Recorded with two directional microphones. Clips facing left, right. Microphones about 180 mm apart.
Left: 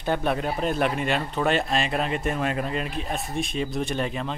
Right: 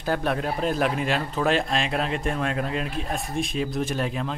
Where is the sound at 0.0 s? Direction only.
Centre (ahead or behind).